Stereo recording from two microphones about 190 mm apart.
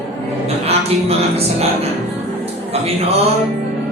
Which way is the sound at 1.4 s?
35° right (ahead or behind).